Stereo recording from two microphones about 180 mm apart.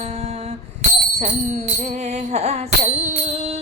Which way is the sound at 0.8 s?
35° right (ahead or behind).